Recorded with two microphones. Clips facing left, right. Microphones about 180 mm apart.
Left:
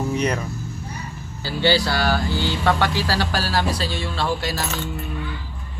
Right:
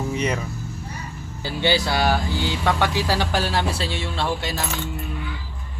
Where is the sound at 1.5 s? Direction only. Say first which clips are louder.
Left 2 dB; 20° right (ahead or behind).